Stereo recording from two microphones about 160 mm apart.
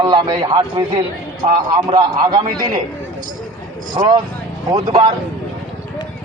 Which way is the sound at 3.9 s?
30° right (ahead or behind).